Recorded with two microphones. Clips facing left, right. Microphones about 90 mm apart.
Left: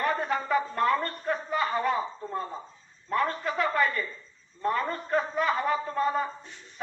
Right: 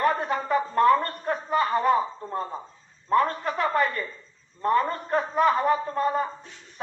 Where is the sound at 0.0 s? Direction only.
35° right (ahead or behind).